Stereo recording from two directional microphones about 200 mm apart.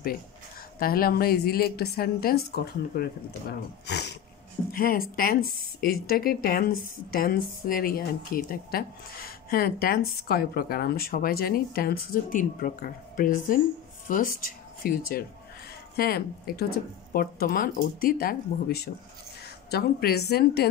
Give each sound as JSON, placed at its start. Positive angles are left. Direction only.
{"t": 0.7, "sound": "speech", "side_deg": 45}